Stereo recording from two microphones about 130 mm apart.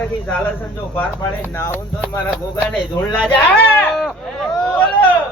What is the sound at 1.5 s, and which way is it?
Speech, 20° left (ahead or behind).